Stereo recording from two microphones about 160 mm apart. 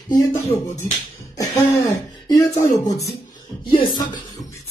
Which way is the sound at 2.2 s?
25° left (ahead or behind).